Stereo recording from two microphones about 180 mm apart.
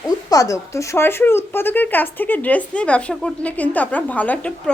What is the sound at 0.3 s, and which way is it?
Speech, 20° left (ahead or behind).